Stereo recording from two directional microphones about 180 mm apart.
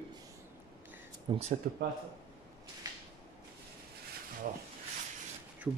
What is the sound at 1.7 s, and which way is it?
Speech, 50° right (ahead or behind).